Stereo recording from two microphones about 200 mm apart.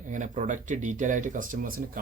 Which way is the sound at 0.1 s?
40° right (ahead or behind).